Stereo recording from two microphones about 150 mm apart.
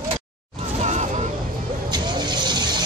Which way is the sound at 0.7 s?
50° right (ahead or behind).